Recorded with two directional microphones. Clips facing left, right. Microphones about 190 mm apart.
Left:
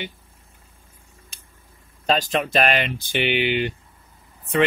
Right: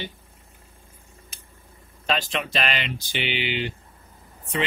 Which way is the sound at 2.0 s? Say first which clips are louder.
Left 5 dB; 40° left (ahead or behind).